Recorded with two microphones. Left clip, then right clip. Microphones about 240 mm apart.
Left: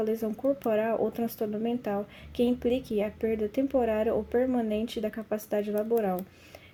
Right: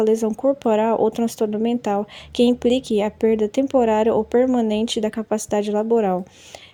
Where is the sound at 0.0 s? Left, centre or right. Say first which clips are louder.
Right 11 dB; right.